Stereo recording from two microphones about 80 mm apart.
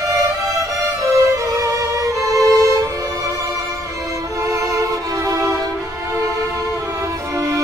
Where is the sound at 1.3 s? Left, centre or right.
Right.